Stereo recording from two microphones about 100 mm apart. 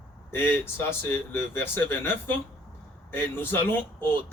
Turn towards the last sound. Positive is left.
turn(degrees=20)  # may be behind; listen again after turning